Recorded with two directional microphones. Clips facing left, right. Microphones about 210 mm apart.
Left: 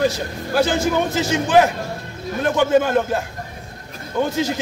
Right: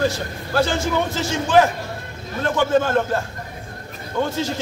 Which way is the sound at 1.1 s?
15° left (ahead or behind).